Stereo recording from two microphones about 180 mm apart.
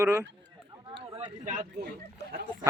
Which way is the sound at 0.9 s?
25° right (ahead or behind).